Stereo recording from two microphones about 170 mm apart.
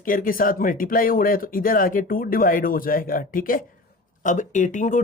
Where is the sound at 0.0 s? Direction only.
55° left (ahead or behind).